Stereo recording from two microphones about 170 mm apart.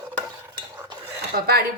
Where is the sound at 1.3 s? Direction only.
65° right (ahead or behind).